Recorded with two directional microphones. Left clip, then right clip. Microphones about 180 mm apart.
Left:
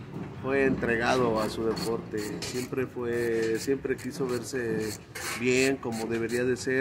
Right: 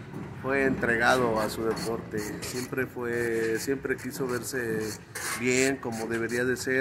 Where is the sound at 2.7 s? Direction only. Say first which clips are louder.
Right 1 dB; centre (ahead or behind).